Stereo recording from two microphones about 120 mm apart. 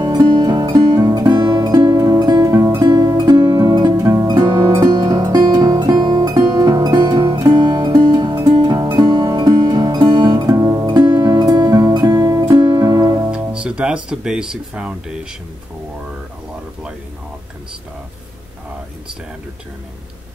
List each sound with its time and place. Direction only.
0.0 s music: 35° right (ahead or behind)
13.3 s music: 10° right (ahead or behind)